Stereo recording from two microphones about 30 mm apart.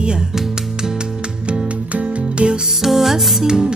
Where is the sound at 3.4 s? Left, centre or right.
Right.